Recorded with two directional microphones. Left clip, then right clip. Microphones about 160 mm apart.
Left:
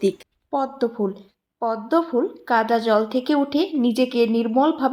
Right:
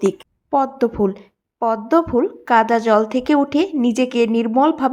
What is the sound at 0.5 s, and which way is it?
A woman's voice, 30° right (ahead or behind).